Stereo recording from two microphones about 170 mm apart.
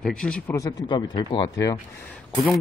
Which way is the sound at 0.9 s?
25° left (ahead or behind).